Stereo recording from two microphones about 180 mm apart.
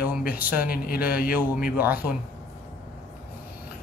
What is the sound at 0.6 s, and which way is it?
Speech, 55° left (ahead or behind).